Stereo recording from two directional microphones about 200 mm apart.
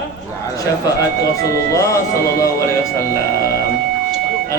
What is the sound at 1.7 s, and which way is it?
Speech, 15° left (ahead or behind).